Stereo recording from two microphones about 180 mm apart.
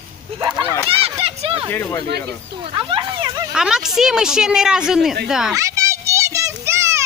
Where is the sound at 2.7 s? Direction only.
30° right (ahead or behind).